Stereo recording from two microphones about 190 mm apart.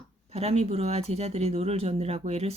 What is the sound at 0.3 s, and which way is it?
Speech, 35° right (ahead or behind).